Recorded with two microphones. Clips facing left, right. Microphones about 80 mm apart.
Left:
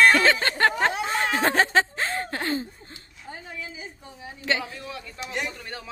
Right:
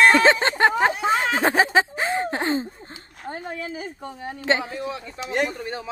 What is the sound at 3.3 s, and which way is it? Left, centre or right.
A woman's voice, right.